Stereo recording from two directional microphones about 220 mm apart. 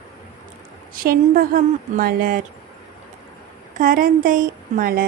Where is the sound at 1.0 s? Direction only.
40° right (ahead or behind).